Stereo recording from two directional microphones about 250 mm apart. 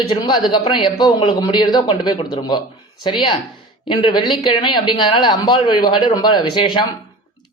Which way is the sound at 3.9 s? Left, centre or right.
Centre.